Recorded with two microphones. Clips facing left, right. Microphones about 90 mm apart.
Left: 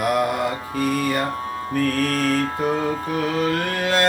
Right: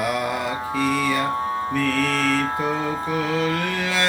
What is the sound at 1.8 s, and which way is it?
Music, 65° right (ahead or behind).